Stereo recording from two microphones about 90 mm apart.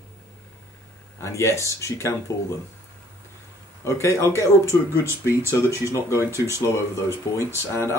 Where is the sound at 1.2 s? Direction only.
30° left (ahead or behind).